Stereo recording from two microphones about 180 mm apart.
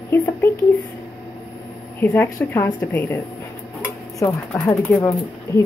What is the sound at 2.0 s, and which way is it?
Speech, 10° left (ahead or behind).